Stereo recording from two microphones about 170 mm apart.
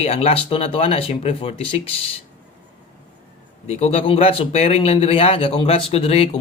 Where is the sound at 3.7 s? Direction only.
40° left (ahead or behind).